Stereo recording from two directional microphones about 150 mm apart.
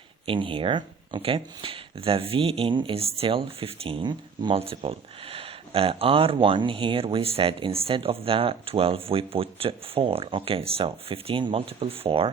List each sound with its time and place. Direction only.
0.3 s speech: 35° right (ahead or behind)